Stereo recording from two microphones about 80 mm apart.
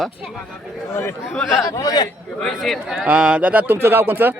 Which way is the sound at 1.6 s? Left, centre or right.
Left.